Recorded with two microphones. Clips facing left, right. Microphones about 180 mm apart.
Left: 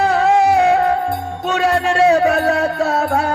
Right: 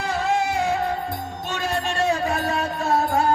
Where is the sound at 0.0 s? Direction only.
65° left (ahead or behind).